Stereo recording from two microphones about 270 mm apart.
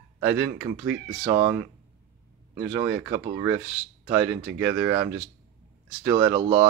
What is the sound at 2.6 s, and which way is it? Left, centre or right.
Speech, centre.